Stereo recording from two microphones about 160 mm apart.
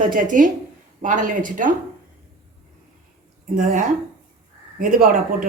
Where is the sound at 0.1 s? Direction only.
60° right (ahead or behind).